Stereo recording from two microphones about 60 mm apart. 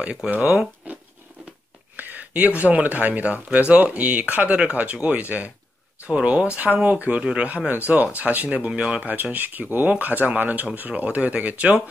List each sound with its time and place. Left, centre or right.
0.0 s speech: right
2.0 s a sound: right
2.6 s speech: right